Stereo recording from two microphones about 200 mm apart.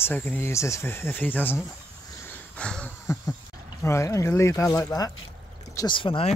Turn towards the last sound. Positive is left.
turn(degrees=25)  # may be behind; listen again after turning